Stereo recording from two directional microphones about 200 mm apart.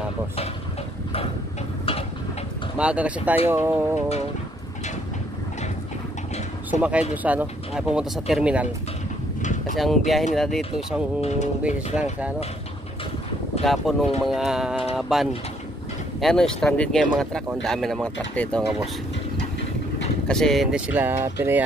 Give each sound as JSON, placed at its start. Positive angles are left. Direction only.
{"t": 2.8, "sound": "speech", "side_deg": -5}
{"t": 6.7, "sound": "speech", "side_deg": -5}
{"t": 9.4, "sound": "a sound", "side_deg": 40}
{"t": 9.8, "sound": "speech", "side_deg": 0}
{"t": 11.1, "sound": "speech", "side_deg": 35}
{"t": 11.6, "sound": "speech", "side_deg": -5}
{"t": 13.7, "sound": "speech", "side_deg": 0}
{"t": 20.2, "sound": "speech", "side_deg": 0}